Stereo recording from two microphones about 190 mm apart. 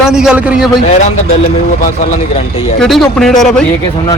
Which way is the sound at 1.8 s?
45° left (ahead or behind).